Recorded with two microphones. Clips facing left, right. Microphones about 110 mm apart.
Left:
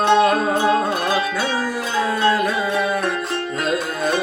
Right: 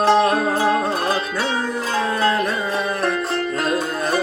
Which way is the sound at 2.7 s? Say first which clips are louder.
Left 1 dB; 25° right (ahead or behind).